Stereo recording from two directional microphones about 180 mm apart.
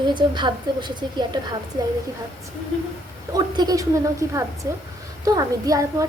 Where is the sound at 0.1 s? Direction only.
25° right (ahead or behind).